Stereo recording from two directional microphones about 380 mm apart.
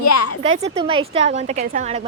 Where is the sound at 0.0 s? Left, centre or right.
Left.